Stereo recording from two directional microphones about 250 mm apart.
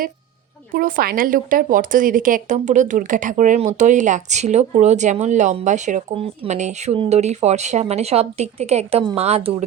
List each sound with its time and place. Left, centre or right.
0.7 s speech: right